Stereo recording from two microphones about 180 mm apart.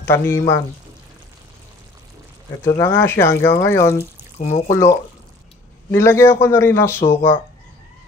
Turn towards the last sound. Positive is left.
turn(degrees=15)  # may be behind; listen again after turning